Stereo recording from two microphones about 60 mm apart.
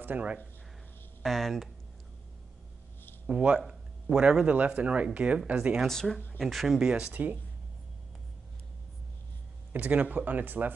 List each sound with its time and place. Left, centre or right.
0.0 s speech: right
1.2 s speech: centre
3.3 s speech: centre
3.6 s a sound: centre
4.5 s speech: right
5.9 s speech: centre
6.9 s speech: centre
9.7 s speech: right